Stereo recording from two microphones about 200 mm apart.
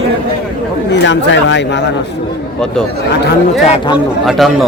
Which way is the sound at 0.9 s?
65° left (ahead or behind).